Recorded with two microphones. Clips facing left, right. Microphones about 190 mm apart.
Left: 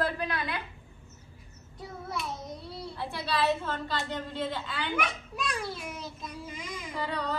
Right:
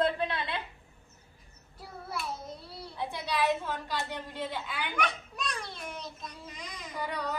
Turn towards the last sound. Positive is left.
turn(degrees=-15)  # may be behind; listen again after turning